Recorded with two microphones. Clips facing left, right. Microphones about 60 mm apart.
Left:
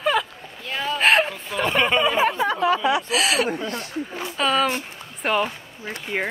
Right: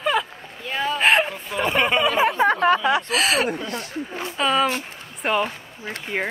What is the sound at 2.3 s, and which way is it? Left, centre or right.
Speech, right.